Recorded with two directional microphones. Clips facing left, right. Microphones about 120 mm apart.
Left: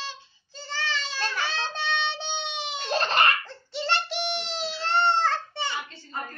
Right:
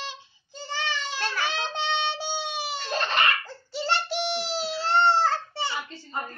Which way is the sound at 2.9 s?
40° left (ahead or behind).